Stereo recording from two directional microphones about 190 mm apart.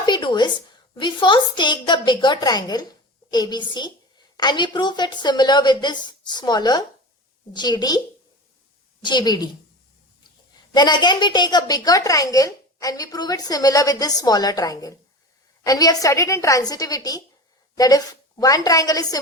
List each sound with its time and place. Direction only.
0.0 s a sound: 25° left (ahead or behind)
0.9 s a woman's voice: 25° left (ahead or behind)
9.0 s a woman's voice: 20° left (ahead or behind)
10.8 s a woman's voice: 20° left (ahead or behind)